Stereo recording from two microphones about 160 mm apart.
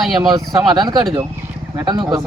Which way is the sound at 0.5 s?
25° right (ahead or behind).